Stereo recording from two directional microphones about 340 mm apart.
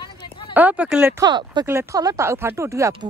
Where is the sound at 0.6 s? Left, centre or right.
Centre.